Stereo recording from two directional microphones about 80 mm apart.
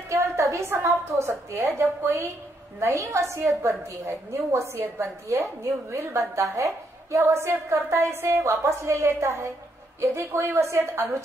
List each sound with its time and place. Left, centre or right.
0.1 s a woman's voice: right